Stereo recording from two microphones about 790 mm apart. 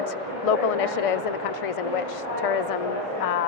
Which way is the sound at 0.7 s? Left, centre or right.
Left.